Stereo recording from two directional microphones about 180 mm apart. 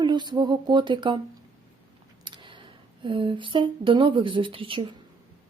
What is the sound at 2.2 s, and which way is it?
Speech, 25° right (ahead or behind).